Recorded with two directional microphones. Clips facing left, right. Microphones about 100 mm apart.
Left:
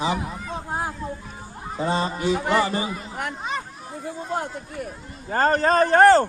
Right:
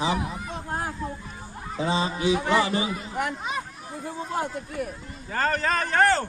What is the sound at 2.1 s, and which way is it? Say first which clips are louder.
Speech: left 1 dB; centre (ahead or behind).